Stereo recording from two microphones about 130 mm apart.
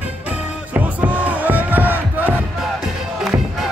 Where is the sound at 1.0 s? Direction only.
10° right (ahead or behind).